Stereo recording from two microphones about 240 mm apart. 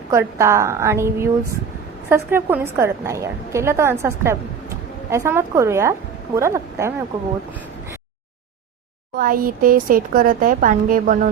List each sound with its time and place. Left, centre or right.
0.1 s a woman's voice: centre
9.1 s speech: right